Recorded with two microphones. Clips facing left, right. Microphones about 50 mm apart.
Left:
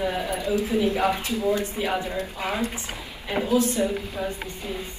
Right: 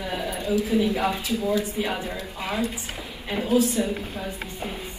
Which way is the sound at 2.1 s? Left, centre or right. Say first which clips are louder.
Left 2 dB; left.